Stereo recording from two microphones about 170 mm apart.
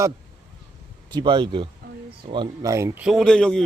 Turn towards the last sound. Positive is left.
turn(degrees=5)  # may be behind; listen again after turning